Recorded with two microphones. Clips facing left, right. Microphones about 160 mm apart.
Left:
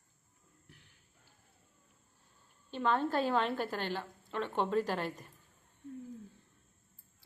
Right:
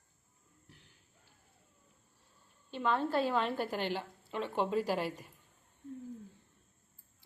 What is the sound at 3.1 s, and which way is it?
Speech, 40° left (ahead or behind).